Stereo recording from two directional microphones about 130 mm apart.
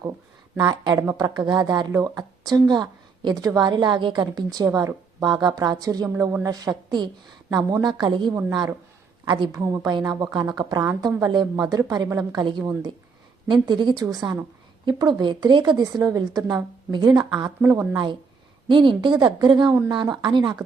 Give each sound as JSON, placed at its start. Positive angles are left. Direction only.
{"t": 0.5, "sound": "a woman's voice", "side_deg": -35}
{"t": 9.6, "sound": "a woman's voice", "side_deg": -25}
{"t": 17.6, "sound": "a woman's voice", "side_deg": -20}
{"t": 17.9, "sound": "a woman's voice", "side_deg": -35}